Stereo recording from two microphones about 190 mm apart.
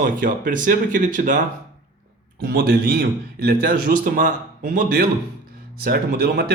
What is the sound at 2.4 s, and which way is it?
A man's voice, 55° right (ahead or behind).